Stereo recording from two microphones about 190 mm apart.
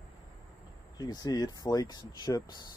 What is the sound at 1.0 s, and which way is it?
Speech, 20° left (ahead or behind).